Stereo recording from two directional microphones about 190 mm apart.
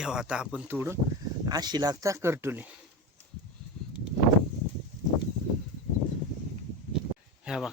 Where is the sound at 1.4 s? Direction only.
20° right (ahead or behind).